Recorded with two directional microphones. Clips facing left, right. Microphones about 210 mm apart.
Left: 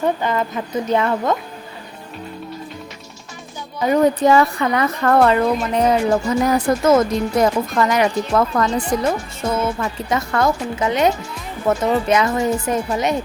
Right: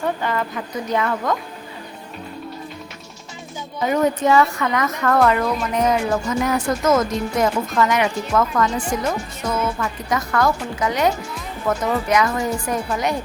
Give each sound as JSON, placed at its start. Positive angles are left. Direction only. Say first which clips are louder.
{"t": 0.0, "sound": "a woman's voice", "louder": "left 3 dB", "side_deg": 20}
{"t": 3.9, "sound": "a woman's voice", "louder": "left 3 dB", "side_deg": 35}